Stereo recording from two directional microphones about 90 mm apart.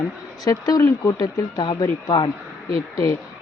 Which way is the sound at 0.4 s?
45° left (ahead or behind).